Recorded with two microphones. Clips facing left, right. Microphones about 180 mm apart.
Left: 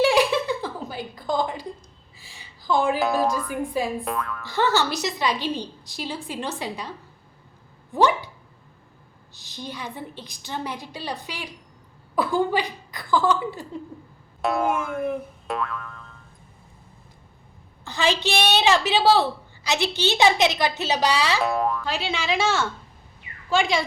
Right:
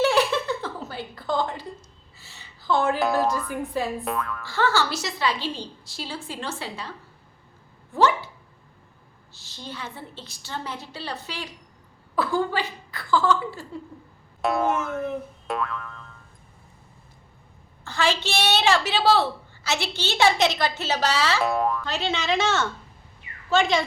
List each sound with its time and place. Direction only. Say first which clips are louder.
0.0 s a sound: left 2 dB; 15° left (ahead or behind)
3.2 s a woman's voice: left 1 dB; 10° left (ahead or behind)
4.0 s speech: even; centre (ahead or behind)
4.4 s a woman's voice: left 2 dB; 20° left (ahead or behind)
7.9 s a woman's voice: left 1 dB; 15° left (ahead or behind)
9.3 s a woman's voice: left 3 dB; 15° left (ahead or behind)
14.4 s speech: even; centre (ahead or behind)
14.7 s boing: left 1 dB; 10° left (ahead or behind)
17.8 s a woman's voice: left 1 dB; 15° left (ahead or behind)
21.4 s a woman's voice: even; centre (ahead or behind)